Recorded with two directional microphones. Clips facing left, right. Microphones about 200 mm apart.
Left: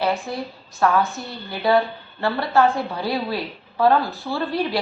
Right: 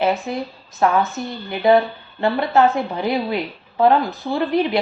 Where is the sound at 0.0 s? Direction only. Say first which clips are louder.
Right 3 dB; 20° right (ahead or behind).